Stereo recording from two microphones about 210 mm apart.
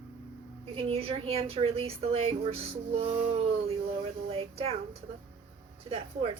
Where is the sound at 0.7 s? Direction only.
25° right (ahead or behind).